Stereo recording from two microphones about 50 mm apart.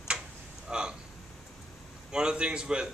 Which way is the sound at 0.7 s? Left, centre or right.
Centre.